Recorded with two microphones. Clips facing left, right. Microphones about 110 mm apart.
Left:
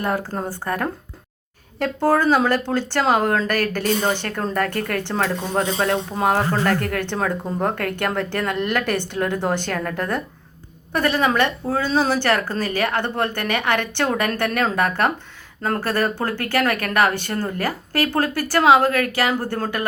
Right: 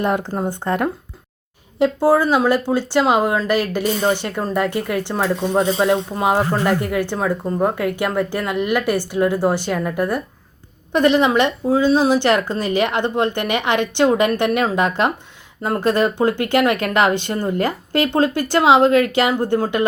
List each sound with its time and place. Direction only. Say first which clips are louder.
0.0 s speech: right 4 dB; 20° right (ahead or behind)
1.8 s speech: right 3 dB; 10° right (ahead or behind)
10.9 s speech: right 5 dB; 20° right (ahead or behind)